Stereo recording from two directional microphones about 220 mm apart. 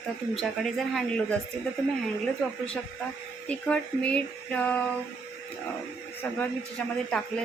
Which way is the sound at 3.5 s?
5° left (ahead or behind).